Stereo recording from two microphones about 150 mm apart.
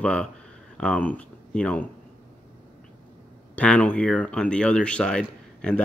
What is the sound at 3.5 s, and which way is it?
Speech, 10° left (ahead or behind).